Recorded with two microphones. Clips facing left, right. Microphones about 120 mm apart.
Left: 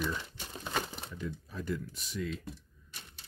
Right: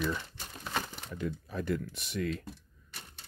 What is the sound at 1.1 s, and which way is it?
Speech, 60° right (ahead or behind).